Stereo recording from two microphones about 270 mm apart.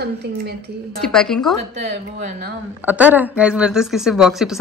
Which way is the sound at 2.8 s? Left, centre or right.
Centre.